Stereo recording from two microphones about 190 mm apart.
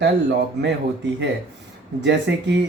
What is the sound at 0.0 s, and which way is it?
Speech, 65° right (ahead or behind).